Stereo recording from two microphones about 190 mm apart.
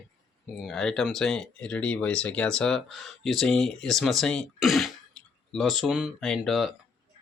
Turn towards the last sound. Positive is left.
turn(degrees=0)  # may be behind; listen again after turning